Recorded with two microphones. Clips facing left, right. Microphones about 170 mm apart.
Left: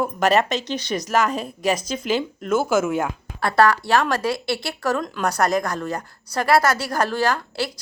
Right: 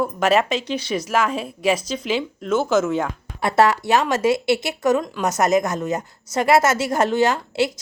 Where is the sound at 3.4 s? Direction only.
20° right (ahead or behind).